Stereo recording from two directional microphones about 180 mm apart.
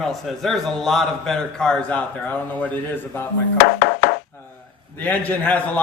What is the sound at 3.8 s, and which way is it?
Chopping, 65° left (ahead or behind).